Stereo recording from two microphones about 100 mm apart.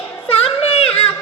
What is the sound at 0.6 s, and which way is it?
Yodeling, 80° left.